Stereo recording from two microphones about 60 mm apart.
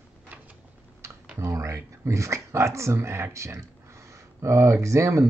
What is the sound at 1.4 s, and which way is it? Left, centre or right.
Speech, right.